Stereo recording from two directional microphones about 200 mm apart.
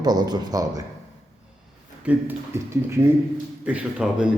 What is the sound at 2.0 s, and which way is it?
A man's voice, 10° right (ahead or behind).